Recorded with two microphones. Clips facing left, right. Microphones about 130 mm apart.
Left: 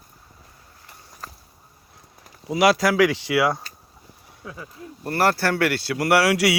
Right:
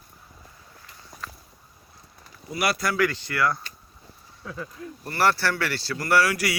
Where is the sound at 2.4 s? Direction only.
90° left.